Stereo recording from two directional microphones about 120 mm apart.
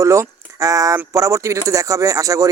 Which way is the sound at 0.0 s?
25° right (ahead or behind).